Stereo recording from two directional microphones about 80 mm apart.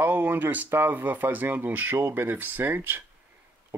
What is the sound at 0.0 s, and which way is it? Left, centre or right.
Speech, right.